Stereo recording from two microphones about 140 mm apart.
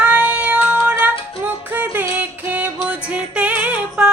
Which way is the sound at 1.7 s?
15° right (ahead or behind).